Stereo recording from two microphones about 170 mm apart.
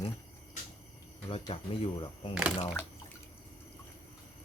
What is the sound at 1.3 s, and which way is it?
Speech, 35° left (ahead or behind).